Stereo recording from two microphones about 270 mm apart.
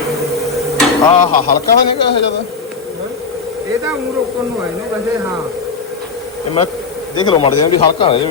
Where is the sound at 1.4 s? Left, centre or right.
Left.